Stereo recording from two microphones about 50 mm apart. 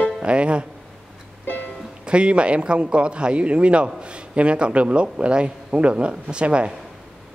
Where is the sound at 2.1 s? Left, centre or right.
Right.